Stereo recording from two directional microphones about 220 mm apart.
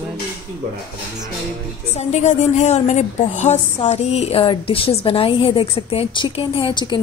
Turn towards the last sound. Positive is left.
turn(degrees=20)  # may be behind; listen again after turning